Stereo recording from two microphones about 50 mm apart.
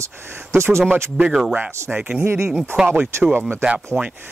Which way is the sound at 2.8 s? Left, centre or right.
Right.